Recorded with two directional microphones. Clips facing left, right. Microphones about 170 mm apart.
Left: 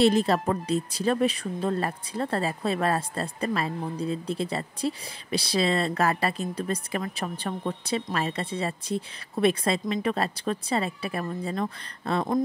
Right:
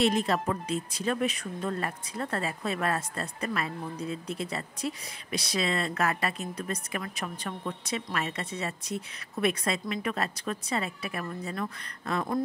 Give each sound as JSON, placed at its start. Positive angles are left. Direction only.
{"t": 0.0, "sound": "speech", "side_deg": 35}